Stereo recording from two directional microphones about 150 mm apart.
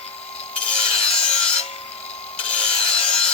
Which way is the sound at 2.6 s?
40° left (ahead or behind).